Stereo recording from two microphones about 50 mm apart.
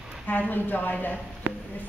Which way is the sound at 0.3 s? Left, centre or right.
Left.